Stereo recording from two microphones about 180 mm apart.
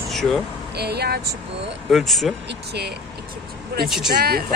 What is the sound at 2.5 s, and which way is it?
Speech, 65° right (ahead or behind).